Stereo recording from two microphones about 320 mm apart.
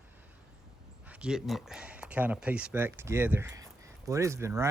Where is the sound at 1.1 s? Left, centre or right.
Centre.